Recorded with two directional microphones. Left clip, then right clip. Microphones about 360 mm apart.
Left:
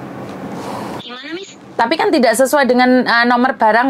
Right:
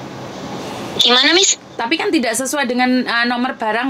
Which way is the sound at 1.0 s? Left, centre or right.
Right.